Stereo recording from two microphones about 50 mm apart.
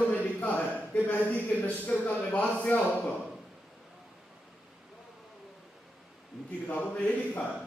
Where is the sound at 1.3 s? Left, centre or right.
Left.